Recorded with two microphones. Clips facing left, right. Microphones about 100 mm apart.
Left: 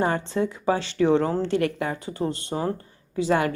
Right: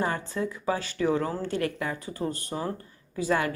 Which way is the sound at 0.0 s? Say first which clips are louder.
Left 5 dB; 25° left (ahead or behind).